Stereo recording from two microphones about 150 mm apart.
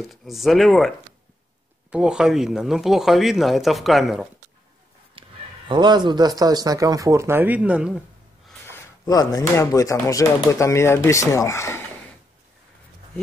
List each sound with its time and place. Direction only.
0.1 s speech: centre (ahead or behind)
5.2 s a sound: 35° right (ahead or behind)
5.7 s speech: 30° right (ahead or behind); by 8.0 s 5° right (ahead or behind)
8.6 s speech: 20° left (ahead or behind)